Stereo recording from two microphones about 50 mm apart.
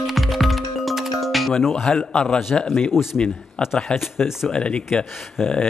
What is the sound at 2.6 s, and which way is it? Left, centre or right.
Speech, centre.